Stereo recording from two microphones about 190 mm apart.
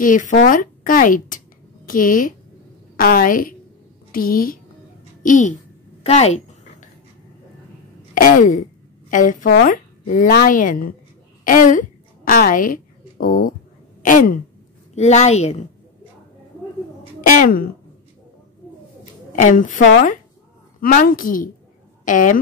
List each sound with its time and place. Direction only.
0.0 s a woman's voice: 45° left (ahead or behind)
6.0 s a sound: 35° left (ahead or behind)
8.1 s a woman's voice: 45° left (ahead or behind)
14.0 s gasp: 45° left (ahead or behind)
15.0 s a woman's voice: 35° left (ahead or behind)
17.4 s speech: 50° left (ahead or behind)
19.3 s speech: 40° left (ahead or behind)